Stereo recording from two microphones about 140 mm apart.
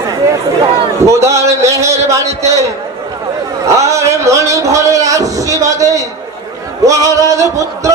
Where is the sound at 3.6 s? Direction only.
20° right (ahead or behind).